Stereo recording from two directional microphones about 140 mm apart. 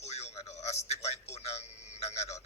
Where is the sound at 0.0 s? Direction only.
50° left (ahead or behind).